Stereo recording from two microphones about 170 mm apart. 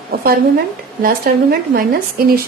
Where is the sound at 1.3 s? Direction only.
60° right (ahead or behind).